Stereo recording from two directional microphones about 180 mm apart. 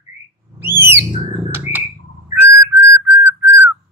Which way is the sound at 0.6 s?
10° right (ahead or behind).